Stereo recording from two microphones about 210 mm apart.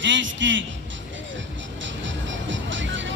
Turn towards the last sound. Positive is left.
turn(degrees=-60)  # may be behind; listen again after turning